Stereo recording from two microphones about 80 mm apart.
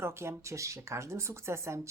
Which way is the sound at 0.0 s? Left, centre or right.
Right.